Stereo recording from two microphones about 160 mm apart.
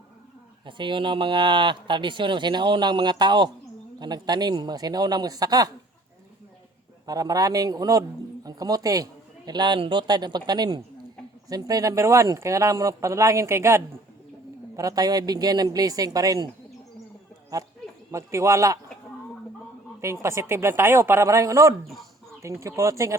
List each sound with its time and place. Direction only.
0.6 s speech: 30° right (ahead or behind)
7.1 s speech: 20° right (ahead or behind)
17.5 s speech: 20° right (ahead or behind)
20.2 s speech: 15° right (ahead or behind)